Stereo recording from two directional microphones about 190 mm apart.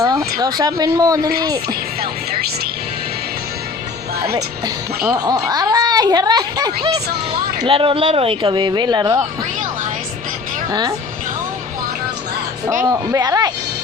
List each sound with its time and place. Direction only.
0.0 s a sound: 20° right (ahead or behind)
0.3 s speech: 20° right (ahead or behind)
5.0 s speech: 20° right (ahead or behind)
10.7 s a woman's voice: 20° right (ahead or behind)
13.1 s speech: 20° right (ahead or behind)